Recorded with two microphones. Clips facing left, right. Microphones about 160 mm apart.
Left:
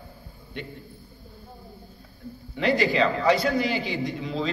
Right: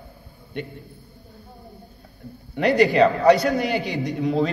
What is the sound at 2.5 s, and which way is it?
A man's voice, 55° right (ahead or behind).